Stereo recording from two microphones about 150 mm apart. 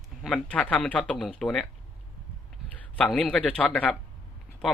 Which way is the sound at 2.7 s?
5° left (ahead or behind).